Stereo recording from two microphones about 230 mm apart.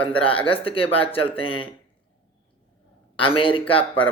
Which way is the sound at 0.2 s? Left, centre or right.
Left.